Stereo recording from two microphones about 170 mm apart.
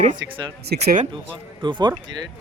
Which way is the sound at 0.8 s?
40° right (ahead or behind).